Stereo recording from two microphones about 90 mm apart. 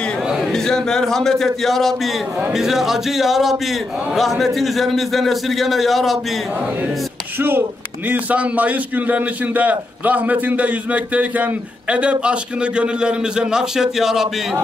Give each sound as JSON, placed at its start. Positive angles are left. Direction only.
{"t": 0.5, "sound": "speech", "side_deg": 5}
{"t": 7.3, "sound": "a man's voice", "side_deg": -25}